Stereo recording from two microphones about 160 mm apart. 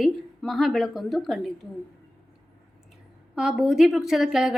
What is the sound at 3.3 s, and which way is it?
A woman's voice, 5° right (ahead or behind).